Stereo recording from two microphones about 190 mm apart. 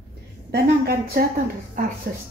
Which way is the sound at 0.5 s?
55° right (ahead or behind).